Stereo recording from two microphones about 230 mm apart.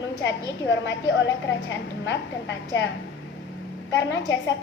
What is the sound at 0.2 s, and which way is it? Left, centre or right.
A woman's voice, left.